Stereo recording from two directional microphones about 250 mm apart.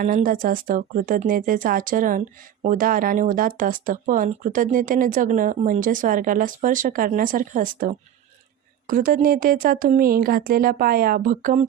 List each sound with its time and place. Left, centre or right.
0.0 s speech: right